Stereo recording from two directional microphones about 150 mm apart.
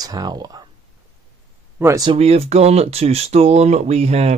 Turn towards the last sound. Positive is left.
turn(degrees=-45)  # may be behind; listen again after turning